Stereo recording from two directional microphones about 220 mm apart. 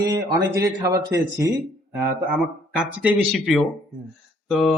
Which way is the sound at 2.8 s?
5° right (ahead or behind).